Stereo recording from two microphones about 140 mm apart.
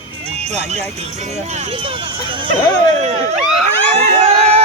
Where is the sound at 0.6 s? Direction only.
50° right (ahead or behind); by 2.4 s 35° right (ahead or behind).